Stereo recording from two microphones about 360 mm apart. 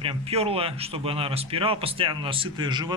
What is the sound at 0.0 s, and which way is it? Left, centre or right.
Speech, centre.